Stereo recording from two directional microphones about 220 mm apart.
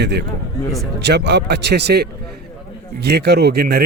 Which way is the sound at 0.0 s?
50° right (ahead or behind).